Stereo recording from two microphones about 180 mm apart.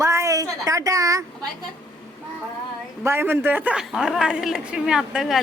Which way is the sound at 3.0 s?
10° right (ahead or behind).